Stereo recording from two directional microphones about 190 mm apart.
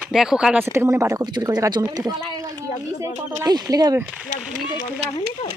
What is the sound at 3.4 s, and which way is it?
Speech, 20° right (ahead or behind).